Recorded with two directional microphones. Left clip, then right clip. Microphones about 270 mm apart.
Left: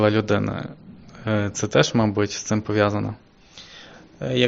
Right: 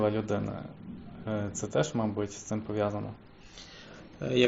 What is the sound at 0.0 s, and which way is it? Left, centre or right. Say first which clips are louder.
Speech: left 10 dB; left.